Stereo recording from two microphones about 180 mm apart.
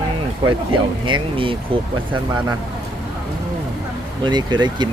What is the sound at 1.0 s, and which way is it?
Speech, 30° right (ahead or behind).